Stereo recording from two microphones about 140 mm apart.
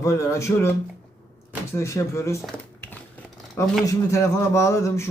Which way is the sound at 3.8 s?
20° left (ahead or behind).